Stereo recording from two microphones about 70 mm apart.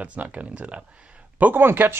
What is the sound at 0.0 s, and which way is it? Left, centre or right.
Speech, centre.